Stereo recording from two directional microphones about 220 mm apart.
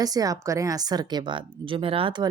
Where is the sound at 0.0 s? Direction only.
15° right (ahead or behind).